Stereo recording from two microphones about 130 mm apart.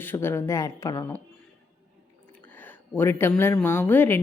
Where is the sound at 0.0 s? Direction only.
15° left (ahead or behind).